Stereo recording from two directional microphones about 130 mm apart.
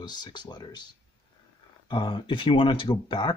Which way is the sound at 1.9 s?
40° left (ahead or behind).